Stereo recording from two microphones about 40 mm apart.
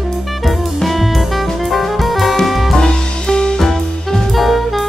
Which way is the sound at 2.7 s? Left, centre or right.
Centre.